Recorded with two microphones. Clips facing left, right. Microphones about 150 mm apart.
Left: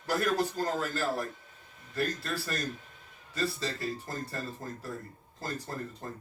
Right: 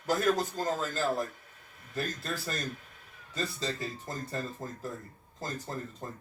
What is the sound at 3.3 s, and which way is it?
A man's voice, 20° right (ahead or behind).